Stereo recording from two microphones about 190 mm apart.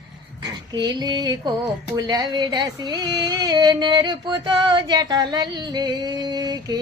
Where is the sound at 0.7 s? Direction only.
20° right (ahead or behind).